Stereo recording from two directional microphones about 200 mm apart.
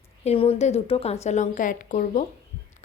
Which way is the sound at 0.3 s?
30° left (ahead or behind).